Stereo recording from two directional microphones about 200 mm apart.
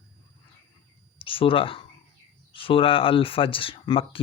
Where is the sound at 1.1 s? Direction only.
25° left (ahead or behind).